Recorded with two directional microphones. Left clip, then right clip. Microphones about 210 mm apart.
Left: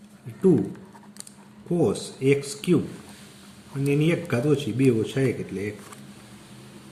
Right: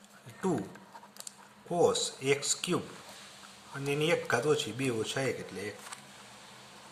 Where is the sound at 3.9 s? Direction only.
25° right (ahead or behind).